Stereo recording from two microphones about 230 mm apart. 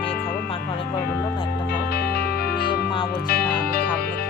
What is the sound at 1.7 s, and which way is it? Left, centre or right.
Music, left.